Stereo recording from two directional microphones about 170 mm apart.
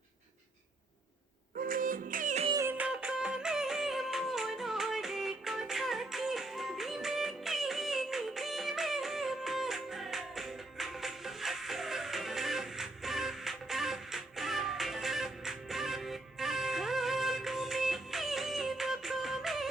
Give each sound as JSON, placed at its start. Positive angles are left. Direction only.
{"t": 1.6, "sound": "music", "side_deg": -55}
{"t": 2.5, "sound": "music", "side_deg": -15}